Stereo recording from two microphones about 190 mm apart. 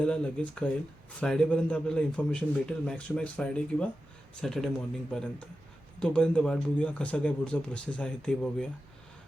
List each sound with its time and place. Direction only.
0.0 s speech: 5° left (ahead or behind)